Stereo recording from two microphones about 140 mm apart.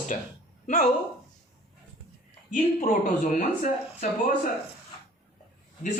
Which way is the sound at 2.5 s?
65° left (ahead or behind).